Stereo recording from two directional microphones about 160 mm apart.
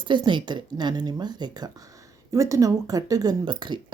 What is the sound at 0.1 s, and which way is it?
Speech, 30° right (ahead or behind).